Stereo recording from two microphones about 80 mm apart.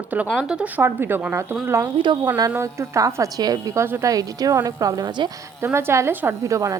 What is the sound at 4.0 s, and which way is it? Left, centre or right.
A woman's voice, right.